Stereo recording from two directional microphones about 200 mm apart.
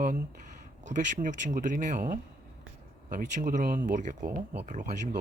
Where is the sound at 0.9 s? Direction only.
40° right (ahead or behind).